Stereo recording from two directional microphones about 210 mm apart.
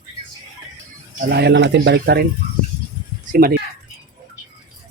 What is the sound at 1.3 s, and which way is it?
Speech, 50° right (ahead or behind).